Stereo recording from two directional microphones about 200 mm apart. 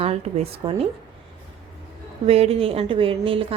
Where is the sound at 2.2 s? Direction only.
30° right (ahead or behind).